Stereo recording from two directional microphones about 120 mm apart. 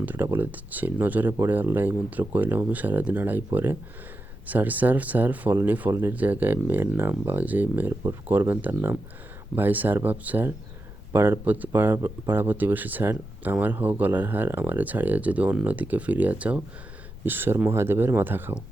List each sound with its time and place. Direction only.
0.0 s speech: 15° right (ahead or behind)